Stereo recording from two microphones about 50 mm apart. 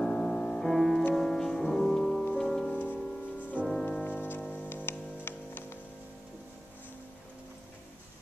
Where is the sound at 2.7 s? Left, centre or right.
Left.